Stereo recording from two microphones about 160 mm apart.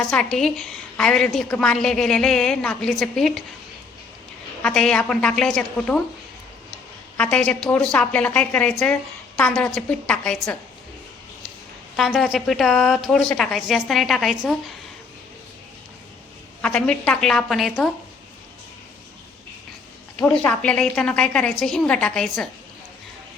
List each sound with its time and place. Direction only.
0.1 s a woman's voice: 5° left (ahead or behind)
4.6 s a woman's voice: 5° left (ahead or behind)
7.2 s a woman's voice: 5° left (ahead or behind)
11.9 s a woman's voice: centre (ahead or behind)
16.6 s a woman's voice: 5° left (ahead or behind)
20.2 s a woman's voice: 5° left (ahead or behind)